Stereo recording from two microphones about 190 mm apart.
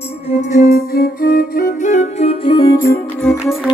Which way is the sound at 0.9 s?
50° left (ahead or behind).